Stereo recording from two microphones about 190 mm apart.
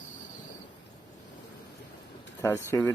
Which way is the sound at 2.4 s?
15° left (ahead or behind).